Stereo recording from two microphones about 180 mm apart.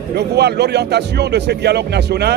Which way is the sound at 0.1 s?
65° right (ahead or behind).